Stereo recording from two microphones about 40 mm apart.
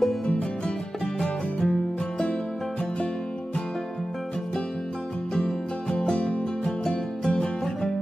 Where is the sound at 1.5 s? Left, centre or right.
Left.